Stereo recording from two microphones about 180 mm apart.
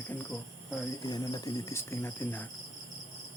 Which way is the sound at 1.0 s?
20° left (ahead or behind).